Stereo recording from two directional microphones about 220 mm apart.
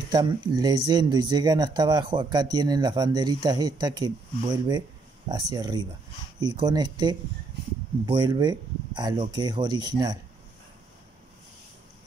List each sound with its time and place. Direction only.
0.1 s speech: 20° right (ahead or behind)